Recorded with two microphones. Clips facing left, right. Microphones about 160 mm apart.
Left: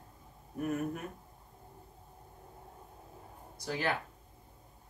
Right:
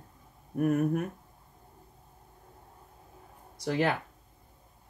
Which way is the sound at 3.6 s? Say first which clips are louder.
Right 9 dB; 65° right (ahead or behind).